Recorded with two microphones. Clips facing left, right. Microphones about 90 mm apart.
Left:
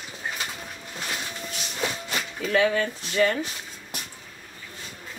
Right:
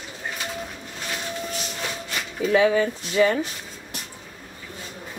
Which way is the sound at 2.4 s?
10° right (ahead or behind).